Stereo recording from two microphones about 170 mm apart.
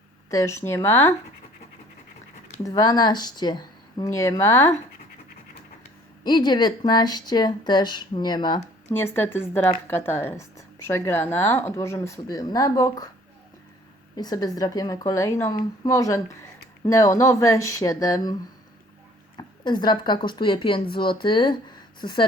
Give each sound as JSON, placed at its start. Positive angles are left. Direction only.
{"t": 0.3, "sound": "speech", "side_deg": 15}
{"t": 2.6, "sound": "speech", "side_deg": 20}
{"t": 6.2, "sound": "speech", "side_deg": 25}
{"t": 8.9, "sound": "speech", "side_deg": 15}
{"t": 14.2, "sound": "speech", "side_deg": 25}
{"t": 19.4, "sound": "speech", "side_deg": 25}